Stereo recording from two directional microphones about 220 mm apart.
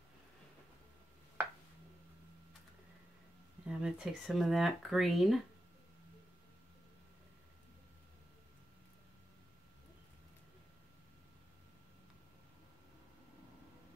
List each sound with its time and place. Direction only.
3.6 s speech: 5° right (ahead or behind)